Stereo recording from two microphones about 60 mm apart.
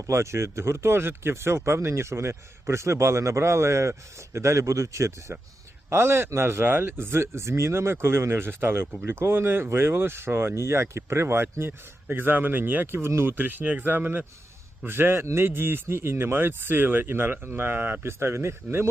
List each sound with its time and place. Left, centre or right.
0.1 s speech: right
5.9 s speech: right